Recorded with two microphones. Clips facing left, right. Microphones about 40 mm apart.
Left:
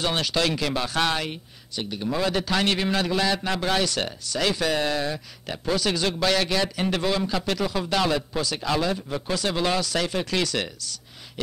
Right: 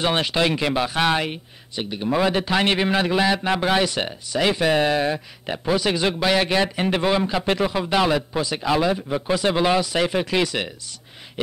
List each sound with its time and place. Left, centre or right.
0.0 s speech: right